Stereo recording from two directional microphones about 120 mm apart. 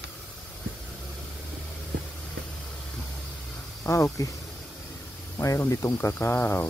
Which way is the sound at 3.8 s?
25° left (ahead or behind).